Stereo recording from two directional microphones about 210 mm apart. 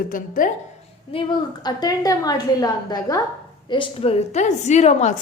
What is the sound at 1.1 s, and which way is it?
A woman's voice, 25° left (ahead or behind).